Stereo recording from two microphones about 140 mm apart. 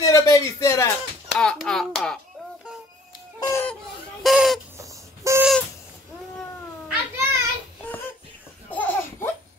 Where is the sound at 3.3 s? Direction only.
25° left (ahead or behind).